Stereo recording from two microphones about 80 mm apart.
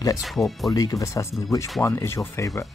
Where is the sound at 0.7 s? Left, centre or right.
Left.